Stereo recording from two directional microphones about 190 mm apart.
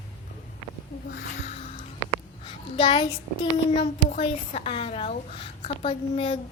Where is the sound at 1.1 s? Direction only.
50° left (ahead or behind).